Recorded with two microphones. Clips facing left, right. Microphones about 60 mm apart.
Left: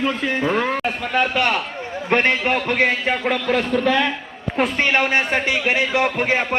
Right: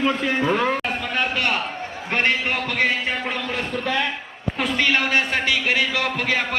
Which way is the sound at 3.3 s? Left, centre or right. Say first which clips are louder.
Left 7 dB; left.